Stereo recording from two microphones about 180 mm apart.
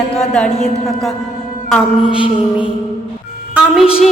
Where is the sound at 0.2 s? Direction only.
5° left (ahead or behind).